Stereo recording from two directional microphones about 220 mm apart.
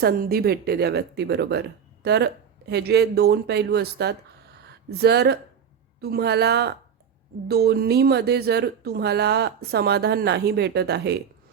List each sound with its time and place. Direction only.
0.0 s speech: 45° right (ahead or behind)